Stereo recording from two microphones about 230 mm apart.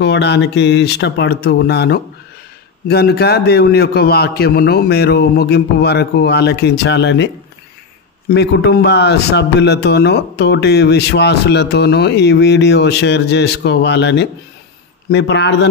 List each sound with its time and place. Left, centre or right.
0.0 s a man's voice: left
8.3 s a man's voice: left